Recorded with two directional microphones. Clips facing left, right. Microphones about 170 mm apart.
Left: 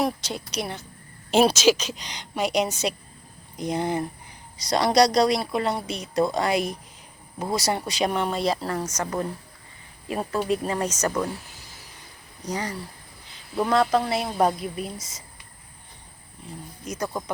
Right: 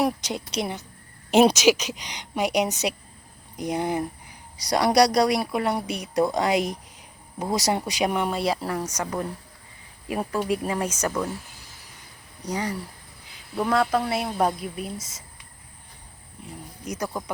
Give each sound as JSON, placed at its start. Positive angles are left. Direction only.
{"t": 0.0, "sound": "speech", "side_deg": -15}
{"t": 12.5, "sound": "a woman's voice", "side_deg": -10}
{"t": 16.8, "sound": "speech", "side_deg": -15}
{"t": 17.1, "sound": "a woman's voice", "side_deg": -5}